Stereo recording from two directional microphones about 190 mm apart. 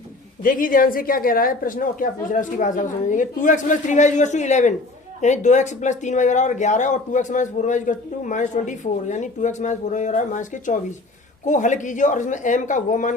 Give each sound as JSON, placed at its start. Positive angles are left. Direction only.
{"t": 0.4, "sound": "a woman's voice", "side_deg": 45}